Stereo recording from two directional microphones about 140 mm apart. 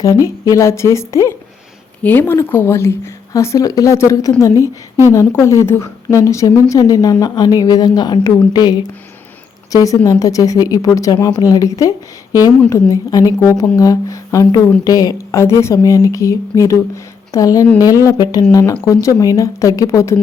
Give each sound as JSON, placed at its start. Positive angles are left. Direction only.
{"t": 0.4, "sound": "a woman's voice", "side_deg": 20}
{"t": 4.5, "sound": "a woman's voice", "side_deg": -20}
{"t": 5.1, "sound": "a woman's voice", "side_deg": 20}